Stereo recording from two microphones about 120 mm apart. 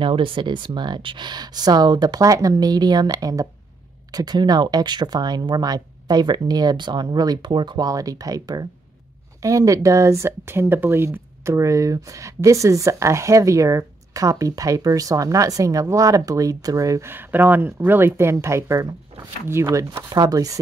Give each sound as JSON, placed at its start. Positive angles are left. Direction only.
{"t": 0.0, "sound": "speech", "side_deg": -45}